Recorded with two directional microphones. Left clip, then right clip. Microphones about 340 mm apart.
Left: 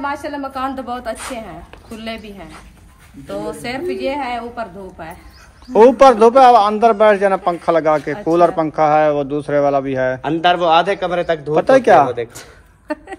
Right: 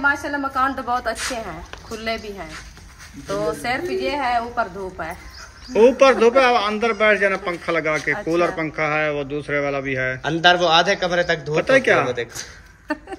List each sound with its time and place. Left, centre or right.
0.0 s a woman's voice: centre
3.6 s a woman's voice: centre
5.7 s a man's voice: centre